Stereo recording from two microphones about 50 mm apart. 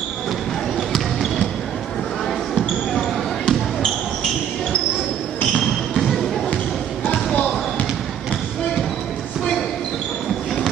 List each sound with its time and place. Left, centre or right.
2.5 s basketball bounce: centre
5.6 s basketball bounce: centre